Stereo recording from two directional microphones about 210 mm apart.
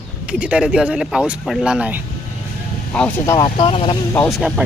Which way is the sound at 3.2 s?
20° left (ahead or behind).